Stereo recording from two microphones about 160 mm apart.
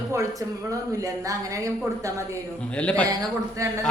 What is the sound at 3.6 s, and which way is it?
Speech, 20° right (ahead or behind).